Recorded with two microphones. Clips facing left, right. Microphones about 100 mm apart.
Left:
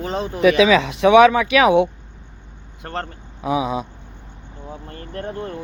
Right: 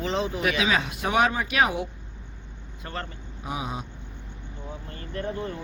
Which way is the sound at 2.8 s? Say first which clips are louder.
Left 7 dB; 60° left (ahead or behind).